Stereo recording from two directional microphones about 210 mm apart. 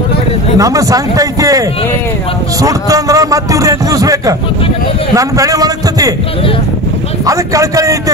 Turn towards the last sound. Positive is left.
turn(degrees=-15)  # may be behind; listen again after turning